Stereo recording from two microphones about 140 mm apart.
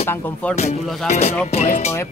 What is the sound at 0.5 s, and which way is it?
Music, 50° left (ahead or behind).